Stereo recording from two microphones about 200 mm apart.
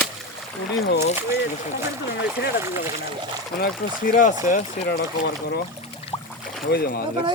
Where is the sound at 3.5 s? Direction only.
45° left (ahead or behind).